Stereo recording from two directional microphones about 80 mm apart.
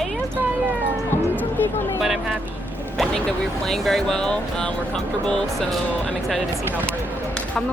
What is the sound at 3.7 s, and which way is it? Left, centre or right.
Speech, centre.